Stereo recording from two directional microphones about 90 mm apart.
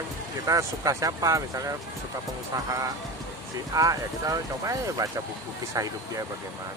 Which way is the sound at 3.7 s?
40° right (ahead or behind).